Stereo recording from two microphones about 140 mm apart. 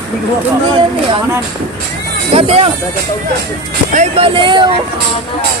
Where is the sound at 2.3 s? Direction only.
45° right (ahead or behind).